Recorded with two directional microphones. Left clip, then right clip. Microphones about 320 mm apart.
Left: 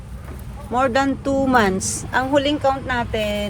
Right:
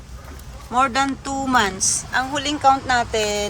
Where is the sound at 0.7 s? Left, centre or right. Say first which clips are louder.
Even; centre.